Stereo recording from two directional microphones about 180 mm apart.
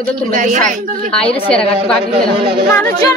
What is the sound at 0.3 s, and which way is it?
Speech, 45° right (ahead or behind).